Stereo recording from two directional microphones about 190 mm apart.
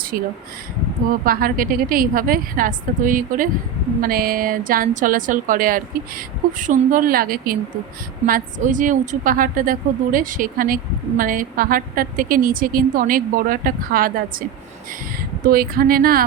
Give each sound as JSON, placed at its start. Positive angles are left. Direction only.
{"t": 1.2, "sound": "a woman's voice", "side_deg": -50}
{"t": 15.4, "sound": "a woman's voice", "side_deg": -50}